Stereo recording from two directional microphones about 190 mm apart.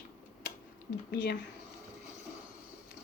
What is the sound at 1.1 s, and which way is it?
Speech, 60° left (ahead or behind).